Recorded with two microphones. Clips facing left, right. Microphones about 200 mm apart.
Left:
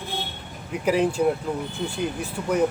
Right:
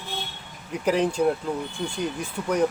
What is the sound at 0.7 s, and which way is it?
Speech, 5° left (ahead or behind).